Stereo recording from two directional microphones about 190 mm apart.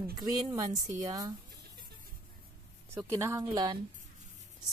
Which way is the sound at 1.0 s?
20° right (ahead or behind).